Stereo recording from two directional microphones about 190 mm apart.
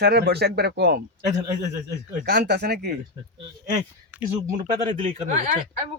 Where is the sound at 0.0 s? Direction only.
60° right (ahead or behind).